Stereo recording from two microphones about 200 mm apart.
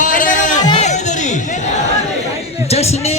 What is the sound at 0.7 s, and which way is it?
Music, 35° left (ahead or behind).